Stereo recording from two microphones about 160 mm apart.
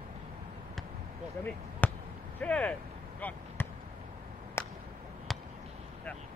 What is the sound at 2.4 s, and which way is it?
Speech, 10° left (ahead or behind).